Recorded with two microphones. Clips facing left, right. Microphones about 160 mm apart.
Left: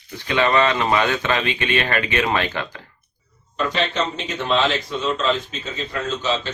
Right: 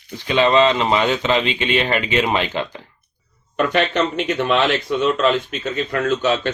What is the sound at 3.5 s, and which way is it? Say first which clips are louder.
Speech: right 4 dB; 65° right (ahead or behind).